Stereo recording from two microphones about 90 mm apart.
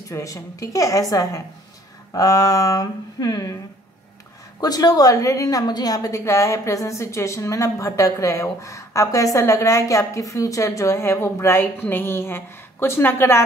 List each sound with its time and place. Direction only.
0.1 s a woman's voice: 35° left (ahead or behind)
4.6 s a woman's voice: 45° left (ahead or behind); by 13.4 s 30° left (ahead or behind)